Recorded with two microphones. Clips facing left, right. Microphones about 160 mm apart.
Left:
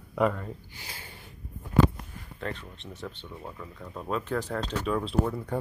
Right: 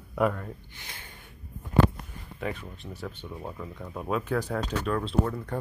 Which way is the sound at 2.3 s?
10° right (ahead or behind).